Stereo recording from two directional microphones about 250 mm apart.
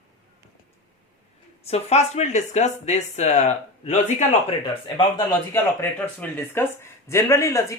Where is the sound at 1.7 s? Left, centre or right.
Left.